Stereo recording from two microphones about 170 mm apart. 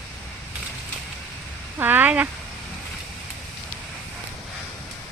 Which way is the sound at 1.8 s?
10° right (ahead or behind).